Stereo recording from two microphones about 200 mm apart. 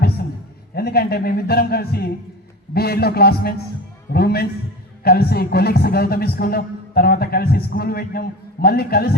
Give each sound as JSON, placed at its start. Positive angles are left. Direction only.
{"t": 0.8, "sound": "a man's voice", "side_deg": 50}